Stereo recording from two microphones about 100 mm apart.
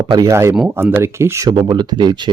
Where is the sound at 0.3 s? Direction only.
25° right (ahead or behind).